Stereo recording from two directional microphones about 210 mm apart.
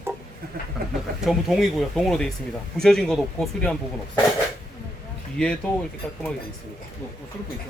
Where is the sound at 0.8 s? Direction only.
45° right (ahead or behind).